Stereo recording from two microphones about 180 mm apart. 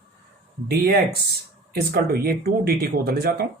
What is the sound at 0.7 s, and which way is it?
Speech, 60° right (ahead or behind).